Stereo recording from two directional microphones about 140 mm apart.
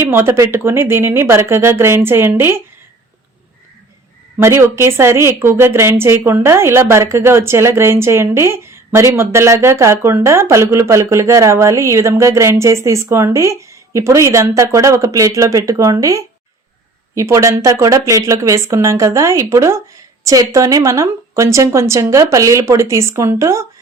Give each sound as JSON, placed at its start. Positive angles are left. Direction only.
{"t": 0.0, "sound": "speech", "side_deg": -15}
{"t": 4.4, "sound": "a woman's voice", "side_deg": -20}